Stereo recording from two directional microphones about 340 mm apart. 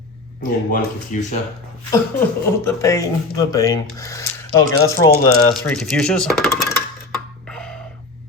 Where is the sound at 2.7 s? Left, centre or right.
Centre.